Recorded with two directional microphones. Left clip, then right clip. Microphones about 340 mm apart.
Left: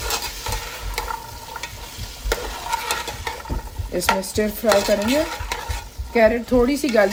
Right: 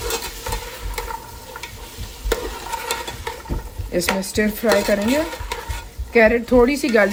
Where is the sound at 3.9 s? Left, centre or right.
Right.